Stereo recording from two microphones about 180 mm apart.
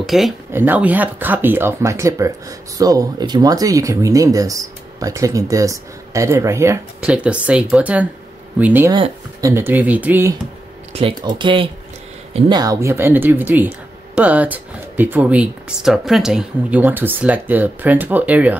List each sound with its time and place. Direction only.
0.0 s speech: centre (ahead or behind)
10.9 s speech: 30° right (ahead or behind); by 18.6 s 10° right (ahead or behind)